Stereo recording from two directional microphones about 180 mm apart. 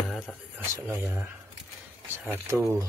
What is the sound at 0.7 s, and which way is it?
Speech, 15° right (ahead or behind).